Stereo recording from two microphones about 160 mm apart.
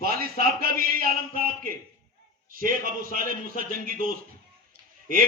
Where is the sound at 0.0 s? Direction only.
70° right (ahead or behind).